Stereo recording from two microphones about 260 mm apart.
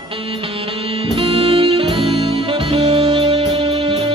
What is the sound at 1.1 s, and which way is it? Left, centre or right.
Music, right.